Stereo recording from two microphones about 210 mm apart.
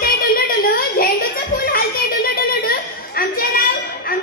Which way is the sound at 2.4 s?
45° left (ahead or behind).